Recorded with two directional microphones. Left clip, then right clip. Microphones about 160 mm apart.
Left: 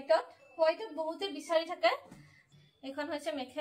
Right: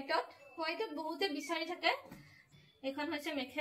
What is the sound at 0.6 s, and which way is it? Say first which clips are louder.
A woman's voice: left 7 dB; 25° left (ahead or behind).